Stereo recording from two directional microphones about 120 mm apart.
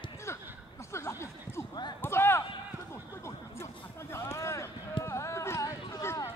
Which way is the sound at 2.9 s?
20° left (ahead or behind).